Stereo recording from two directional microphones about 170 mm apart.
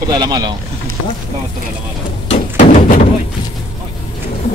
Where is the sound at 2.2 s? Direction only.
45° left (ahead or behind).